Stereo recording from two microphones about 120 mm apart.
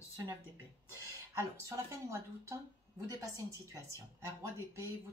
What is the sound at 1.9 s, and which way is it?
A woman's voice, 25° right (ahead or behind).